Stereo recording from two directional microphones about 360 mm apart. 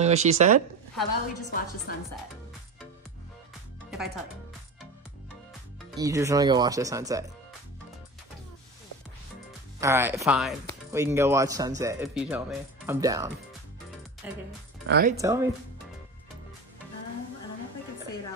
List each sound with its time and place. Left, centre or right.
0.0 s speech: centre
1.5 s a woman's voice: left
3.9 s music: centre
5.9 s speech: centre
9.8 s speech: centre
14.9 s speech: right
15.1 s speech: centre